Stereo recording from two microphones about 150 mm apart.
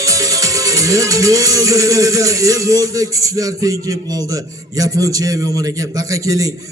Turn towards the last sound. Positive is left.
turn(degrees=-20)  # may be behind; listen again after turning